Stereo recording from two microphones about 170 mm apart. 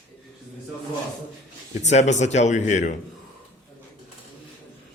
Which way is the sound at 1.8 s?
45° left (ahead or behind).